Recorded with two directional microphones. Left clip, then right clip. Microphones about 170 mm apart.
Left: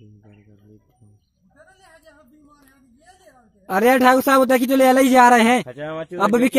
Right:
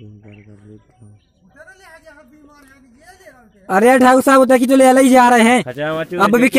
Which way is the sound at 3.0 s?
5° right (ahead or behind).